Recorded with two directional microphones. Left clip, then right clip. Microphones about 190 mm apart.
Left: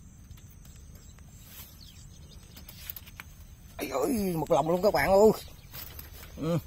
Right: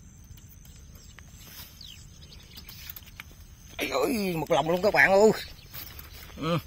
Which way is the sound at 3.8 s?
10° left (ahead or behind).